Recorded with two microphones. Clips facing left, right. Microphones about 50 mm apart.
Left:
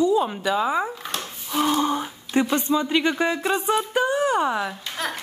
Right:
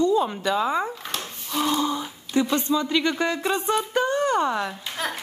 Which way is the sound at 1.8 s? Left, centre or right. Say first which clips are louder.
Left 2 dB; left.